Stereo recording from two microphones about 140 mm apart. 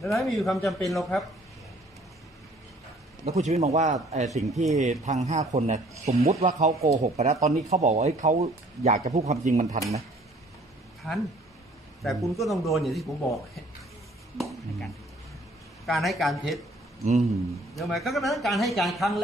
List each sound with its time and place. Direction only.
0.1 s a man's voice: centre (ahead or behind)
3.3 s a man's voice: 55° right (ahead or behind)
11.0 s a man's voice: centre (ahead or behind)
15.8 s a man's voice: centre (ahead or behind)
17.0 s speech: 55° right (ahead or behind)
17.7 s a man's voice: centre (ahead or behind)